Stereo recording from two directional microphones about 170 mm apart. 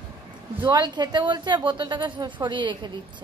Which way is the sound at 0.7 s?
25° right (ahead or behind).